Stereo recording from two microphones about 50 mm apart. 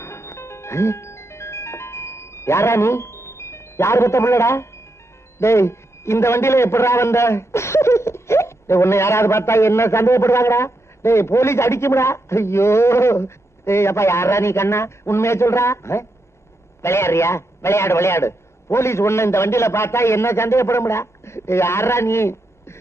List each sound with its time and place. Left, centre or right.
0.0 s music: left
5.4 s a man's voice: left